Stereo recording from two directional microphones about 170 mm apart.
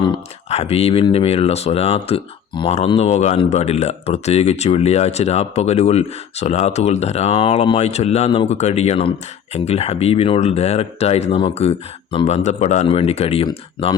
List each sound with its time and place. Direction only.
0.5 s speech: 35° left (ahead or behind)